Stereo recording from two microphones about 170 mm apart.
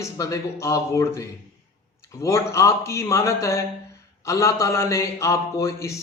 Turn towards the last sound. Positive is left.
turn(degrees=15)  # may be behind; listen again after turning